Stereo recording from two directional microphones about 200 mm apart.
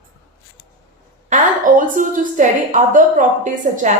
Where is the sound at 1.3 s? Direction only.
40° right (ahead or behind).